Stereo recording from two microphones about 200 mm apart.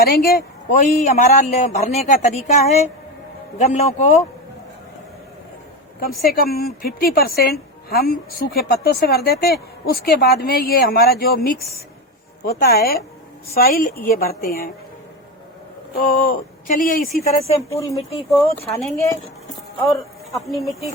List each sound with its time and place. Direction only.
0.0 s a man's voice: 50° left (ahead or behind)
6.2 s a woman's voice: 50° left (ahead or behind)
16.0 s a woman's voice: 45° left (ahead or behind)
17.7 s speech: 15° left (ahead or behind)
18.6 s a man's voice: 30° left (ahead or behind)
20.3 s speech: centre (ahead or behind)